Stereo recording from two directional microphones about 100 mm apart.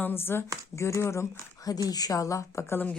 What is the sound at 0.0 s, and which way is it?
A woman's voice, 20° left (ahead or behind).